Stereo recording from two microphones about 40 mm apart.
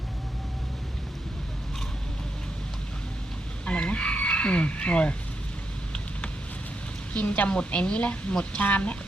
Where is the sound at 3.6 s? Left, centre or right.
Left.